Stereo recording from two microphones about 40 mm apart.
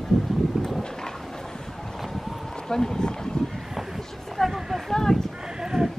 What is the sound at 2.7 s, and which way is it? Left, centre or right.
Speech, centre.